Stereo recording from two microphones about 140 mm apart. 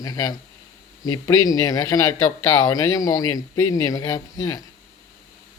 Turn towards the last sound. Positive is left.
turn(degrees=25)  # may be behind; listen again after turning